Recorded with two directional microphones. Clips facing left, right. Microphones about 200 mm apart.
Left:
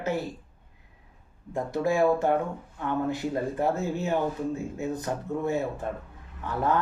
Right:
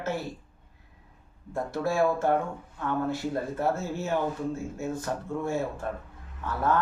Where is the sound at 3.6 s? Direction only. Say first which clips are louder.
Left 2 dB; 15° left (ahead or behind).